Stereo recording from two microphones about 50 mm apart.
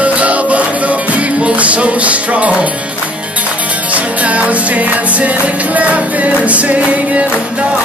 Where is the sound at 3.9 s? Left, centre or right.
Right.